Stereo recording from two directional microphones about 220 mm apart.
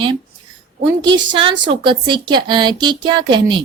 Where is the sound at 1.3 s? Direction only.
25° right (ahead or behind).